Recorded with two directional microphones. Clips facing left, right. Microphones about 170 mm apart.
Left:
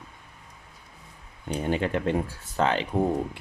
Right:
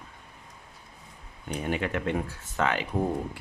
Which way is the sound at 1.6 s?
30° left (ahead or behind).